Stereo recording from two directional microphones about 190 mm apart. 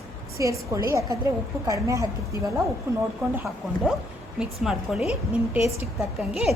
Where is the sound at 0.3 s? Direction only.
15° right (ahead or behind).